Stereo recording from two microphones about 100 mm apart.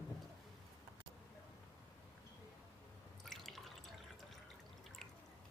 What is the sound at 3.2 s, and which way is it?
Drip, 5° left (ahead or behind).